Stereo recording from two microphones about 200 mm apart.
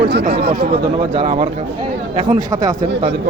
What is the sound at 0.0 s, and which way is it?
Speech, 55° right (ahead or behind).